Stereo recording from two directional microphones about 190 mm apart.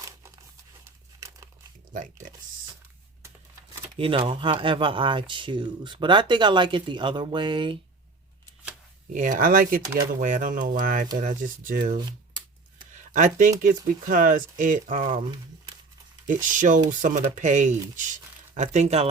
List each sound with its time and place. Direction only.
1.9 s speech: 40° right (ahead or behind)
3.9 s speech: 30° right (ahead or behind)
9.1 s speech: 40° right (ahead or behind)
13.1 s speech: 45° right (ahead or behind)
16.2 s speech: 45° right (ahead or behind)